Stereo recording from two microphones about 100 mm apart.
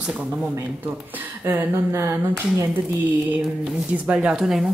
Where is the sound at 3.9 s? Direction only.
10° right (ahead or behind).